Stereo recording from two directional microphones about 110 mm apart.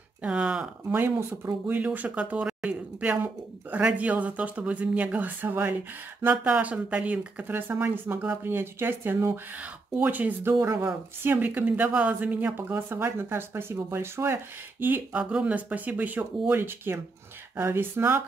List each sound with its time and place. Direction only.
0.2 s speech: 10° right (ahead or behind)